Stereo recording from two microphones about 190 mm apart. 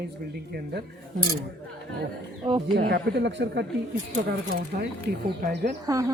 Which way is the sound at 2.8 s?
55° right (ahead or behind).